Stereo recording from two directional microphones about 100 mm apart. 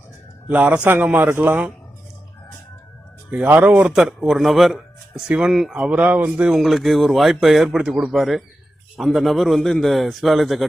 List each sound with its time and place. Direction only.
0.5 s a man's voice: 15° right (ahead or behind)
3.3 s speech: 15° right (ahead or behind)
6.5 s speech: centre (ahead or behind)